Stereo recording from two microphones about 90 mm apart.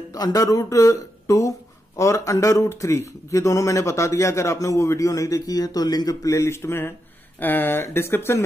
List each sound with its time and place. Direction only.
0.1 s speech: 40° left (ahead or behind)
6.3 s speech: 30° left (ahead or behind)